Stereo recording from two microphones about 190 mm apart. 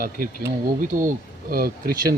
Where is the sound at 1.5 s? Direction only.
50° right (ahead or behind).